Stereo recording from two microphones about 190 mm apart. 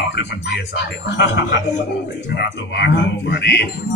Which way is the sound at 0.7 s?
65° left (ahead or behind).